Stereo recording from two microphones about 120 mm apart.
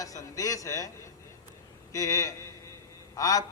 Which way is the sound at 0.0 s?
30° left (ahead or behind).